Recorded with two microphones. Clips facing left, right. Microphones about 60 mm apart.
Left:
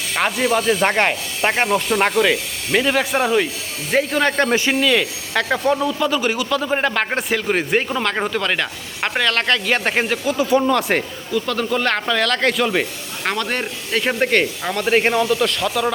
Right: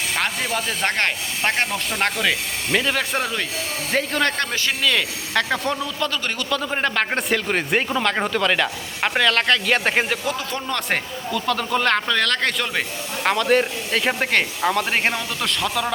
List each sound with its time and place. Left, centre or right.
0.2 s speech: centre
1.6 s a man's voice: left
2.0 s speech: centre
4.4 s a man's voice: left
4.8 s speech: centre